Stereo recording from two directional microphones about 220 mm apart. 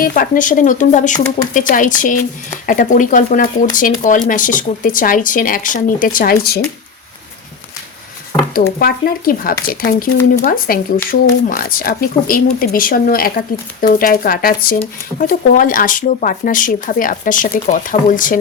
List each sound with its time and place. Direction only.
0.0 s speech: 35° left (ahead or behind)
8.5 s speech: 40° left (ahead or behind)